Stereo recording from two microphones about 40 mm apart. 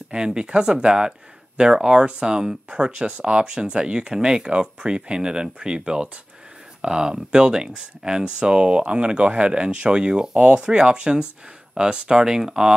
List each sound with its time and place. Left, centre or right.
0.1 s speech: right